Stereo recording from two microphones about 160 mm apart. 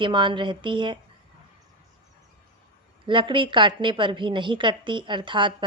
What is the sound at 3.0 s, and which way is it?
A woman's voice, 30° right (ahead or behind).